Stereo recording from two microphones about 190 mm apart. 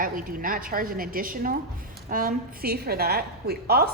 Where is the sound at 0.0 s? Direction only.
45° right (ahead or behind).